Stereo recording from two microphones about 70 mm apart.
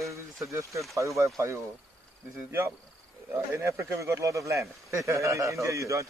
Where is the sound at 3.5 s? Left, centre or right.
Right.